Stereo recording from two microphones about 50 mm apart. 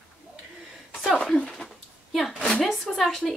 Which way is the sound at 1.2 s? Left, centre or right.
Centre.